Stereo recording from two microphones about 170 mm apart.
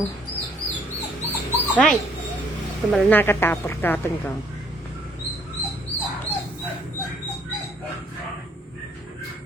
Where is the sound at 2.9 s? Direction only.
10° left (ahead or behind).